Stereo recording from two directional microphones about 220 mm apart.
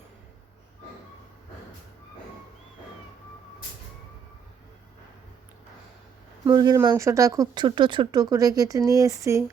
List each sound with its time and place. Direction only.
6.4 s speech: 15° right (ahead or behind)